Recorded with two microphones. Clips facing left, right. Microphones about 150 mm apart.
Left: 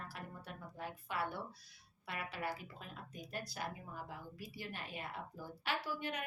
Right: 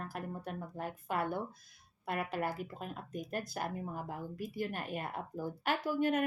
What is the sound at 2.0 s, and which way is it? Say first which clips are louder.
Speech: right 7 dB; 50° right (ahead or behind).